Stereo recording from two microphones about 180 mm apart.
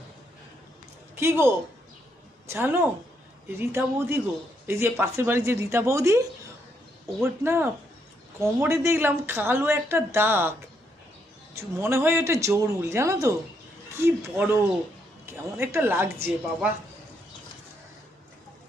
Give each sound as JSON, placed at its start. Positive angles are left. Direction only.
{"t": 1.1, "sound": "a woman's voice", "side_deg": -15}
{"t": 2.5, "sound": "a woman's voice", "side_deg": -10}
{"t": 11.8, "sound": "a woman's voice", "side_deg": -15}